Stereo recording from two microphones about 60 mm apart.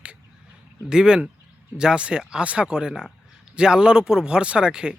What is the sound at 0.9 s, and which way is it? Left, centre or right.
Speech, centre.